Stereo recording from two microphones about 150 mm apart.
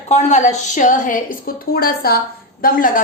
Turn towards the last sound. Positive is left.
turn(degrees=65)  # may be behind; listen again after turning